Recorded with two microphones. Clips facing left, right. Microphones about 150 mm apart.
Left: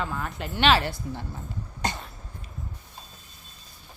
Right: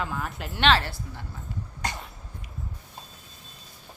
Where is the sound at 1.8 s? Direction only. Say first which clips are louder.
Left 3 dB; 25° left (ahead or behind).